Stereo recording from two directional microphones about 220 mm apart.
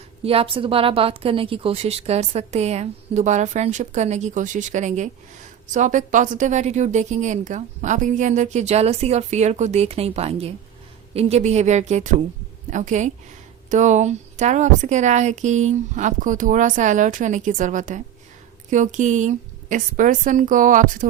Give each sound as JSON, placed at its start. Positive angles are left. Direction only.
{"t": 0.3, "sound": "a woman's voice", "side_deg": -25}